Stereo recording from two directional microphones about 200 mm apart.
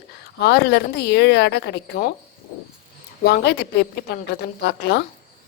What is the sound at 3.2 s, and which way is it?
A woman's voice, 55° left (ahead or behind).